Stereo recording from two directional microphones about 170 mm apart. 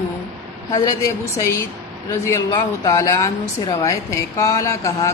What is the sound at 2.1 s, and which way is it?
A woman's voice, 20° left (ahead or behind).